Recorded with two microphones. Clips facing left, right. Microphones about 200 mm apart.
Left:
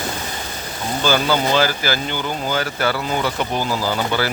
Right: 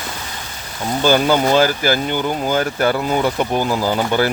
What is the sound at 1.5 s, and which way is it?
Speech, 50° right (ahead or behind).